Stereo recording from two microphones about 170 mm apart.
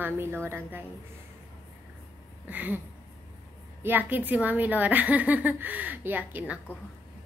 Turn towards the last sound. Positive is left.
turn(degrees=-10)  # may be behind; listen again after turning